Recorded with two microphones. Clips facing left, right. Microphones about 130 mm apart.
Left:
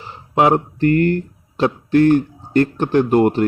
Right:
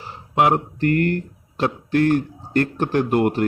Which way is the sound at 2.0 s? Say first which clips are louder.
Left 5 dB; 25° left (ahead or behind).